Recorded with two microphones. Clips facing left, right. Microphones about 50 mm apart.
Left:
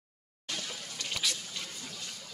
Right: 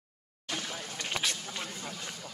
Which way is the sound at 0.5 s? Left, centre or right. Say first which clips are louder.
Right 3 dB; right.